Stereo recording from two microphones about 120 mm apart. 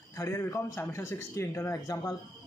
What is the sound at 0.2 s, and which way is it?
A man's voice, 25° left (ahead or behind).